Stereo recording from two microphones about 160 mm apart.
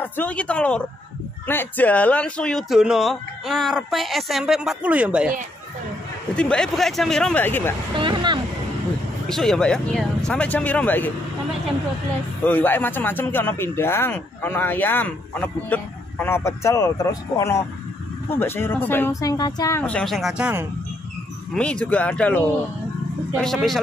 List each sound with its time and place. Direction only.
0.0 s speech: 10° left (ahead or behind); by 5.3 s 10° right (ahead or behind)
6.3 s speech: 5° left (ahead or behind)
7.9 s vehicle: 30° right (ahead or behind)
9.3 s speech: centre (ahead or behind)
12.4 s speech: 10° left (ahead or behind)
19.8 s speech: 5° left (ahead or behind)
21.5 s speech: 5° left (ahead or behind)
23.4 s speech: centre (ahead or behind)